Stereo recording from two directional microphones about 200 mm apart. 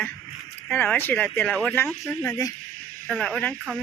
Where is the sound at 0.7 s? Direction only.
10° left (ahead or behind).